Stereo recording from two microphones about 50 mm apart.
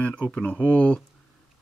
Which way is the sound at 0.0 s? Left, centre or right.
Left.